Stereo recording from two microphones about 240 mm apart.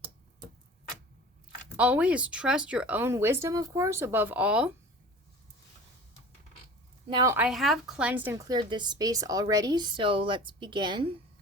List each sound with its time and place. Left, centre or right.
1.7 s a woman's voice: centre
7.1 s a woman's voice: centre